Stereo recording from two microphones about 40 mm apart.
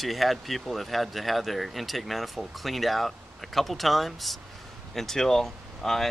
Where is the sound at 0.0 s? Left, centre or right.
Centre.